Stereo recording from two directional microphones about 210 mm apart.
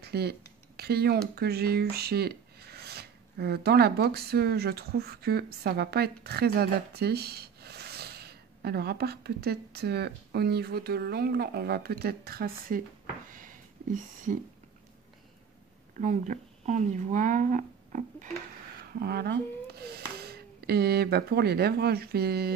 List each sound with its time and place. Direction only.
0.0 s speech: 50° right (ahead or behind)
13.3 s a sound: 40° right (ahead or behind)
16.0 s speech: 35° right (ahead or behind)
18.9 s speech: 50° right (ahead or behind)